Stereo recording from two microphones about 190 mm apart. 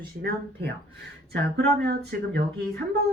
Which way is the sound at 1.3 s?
60° right (ahead or behind).